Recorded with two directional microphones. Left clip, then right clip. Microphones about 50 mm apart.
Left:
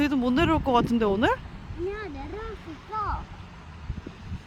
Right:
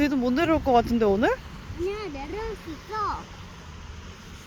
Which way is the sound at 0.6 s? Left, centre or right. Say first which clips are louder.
Right 2 dB; centre.